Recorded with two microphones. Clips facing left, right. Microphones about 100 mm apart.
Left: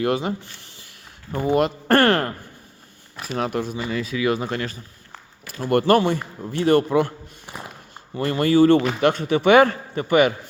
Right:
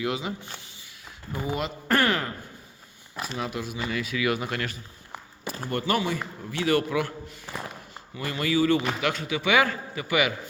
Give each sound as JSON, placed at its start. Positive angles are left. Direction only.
{"t": 0.0, "sound": "speech", "side_deg": 50}
{"t": 1.3, "sound": "speech", "side_deg": -5}
{"t": 1.9, "sound": "a man's voice", "side_deg": 35}
{"t": 3.3, "sound": "speech", "side_deg": 50}
{"t": 3.8, "sound": "speech", "side_deg": 30}
{"t": 5.6, "sound": "speech", "side_deg": 65}
{"t": 5.9, "sound": "speech", "side_deg": 55}
{"t": 6.5, "sound": "speech", "side_deg": 45}
{"t": 7.4, "sound": "a sound", "side_deg": 15}
{"t": 8.1, "sound": "a man's voice", "side_deg": 40}
{"t": 9.6, "sound": "a man's voice", "side_deg": 40}